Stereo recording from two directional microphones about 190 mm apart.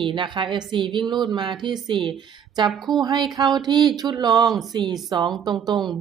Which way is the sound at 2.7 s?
Centre (ahead or behind).